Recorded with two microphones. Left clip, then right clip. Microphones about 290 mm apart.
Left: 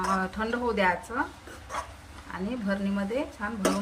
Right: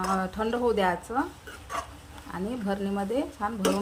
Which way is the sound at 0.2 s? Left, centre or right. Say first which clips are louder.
Right 2 dB; right.